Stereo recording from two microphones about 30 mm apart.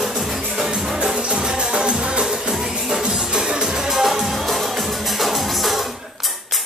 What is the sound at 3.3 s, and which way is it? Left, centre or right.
Music, right.